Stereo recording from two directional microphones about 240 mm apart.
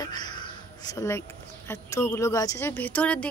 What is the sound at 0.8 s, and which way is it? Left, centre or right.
A woman's voice, centre.